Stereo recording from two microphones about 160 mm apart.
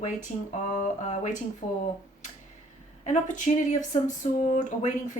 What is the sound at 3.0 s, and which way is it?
Speech, 50° left (ahead or behind).